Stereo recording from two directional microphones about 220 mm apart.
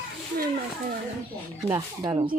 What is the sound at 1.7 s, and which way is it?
Speech, 15° right (ahead or behind).